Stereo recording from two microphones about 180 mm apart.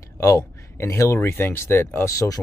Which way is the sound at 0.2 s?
15° left (ahead or behind).